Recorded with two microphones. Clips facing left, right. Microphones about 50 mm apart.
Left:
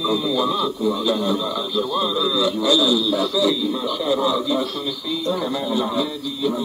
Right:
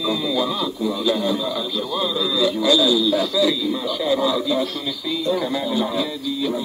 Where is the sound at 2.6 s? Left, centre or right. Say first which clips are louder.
Right 2 dB; centre.